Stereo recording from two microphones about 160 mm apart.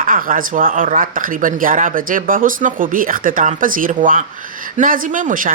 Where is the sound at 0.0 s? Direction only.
60° right (ahead or behind).